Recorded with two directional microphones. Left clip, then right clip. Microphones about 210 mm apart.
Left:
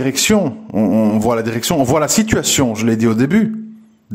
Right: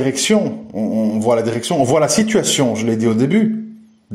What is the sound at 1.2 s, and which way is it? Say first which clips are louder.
Speech: right 1 dB; 25° left (ahead or behind).